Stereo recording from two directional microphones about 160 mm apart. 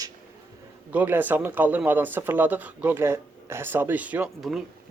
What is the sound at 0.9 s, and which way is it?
Speech, 10° right (ahead or behind).